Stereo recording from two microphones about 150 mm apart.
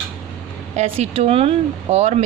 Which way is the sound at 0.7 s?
45° right (ahead or behind).